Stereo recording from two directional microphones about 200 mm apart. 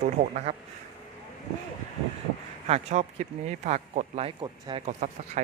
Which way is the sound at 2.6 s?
30° right (ahead or behind).